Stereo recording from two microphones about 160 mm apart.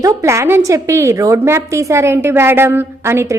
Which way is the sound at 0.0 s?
20° right (ahead or behind).